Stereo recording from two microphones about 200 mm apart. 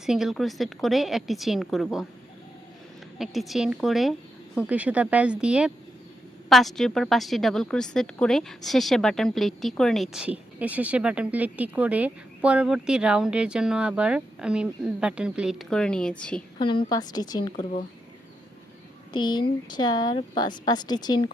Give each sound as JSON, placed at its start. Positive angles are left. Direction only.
{"t": 0.0, "sound": "speech", "side_deg": 0}
{"t": 3.2, "sound": "speech", "side_deg": 0}
{"t": 16.6, "sound": "a woman's voice", "side_deg": 25}
{"t": 19.1, "sound": "a woman's voice", "side_deg": 20}